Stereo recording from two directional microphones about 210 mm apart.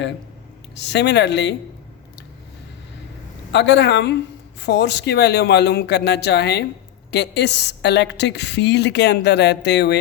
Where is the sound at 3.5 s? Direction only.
55° left (ahead or behind).